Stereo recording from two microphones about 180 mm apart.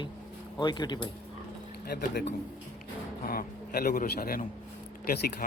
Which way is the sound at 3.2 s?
55° left (ahead or behind).